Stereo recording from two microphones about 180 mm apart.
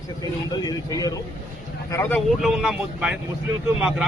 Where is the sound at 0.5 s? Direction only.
20° left (ahead or behind).